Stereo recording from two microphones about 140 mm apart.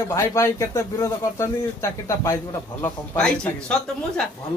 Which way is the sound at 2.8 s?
10° left (ahead or behind).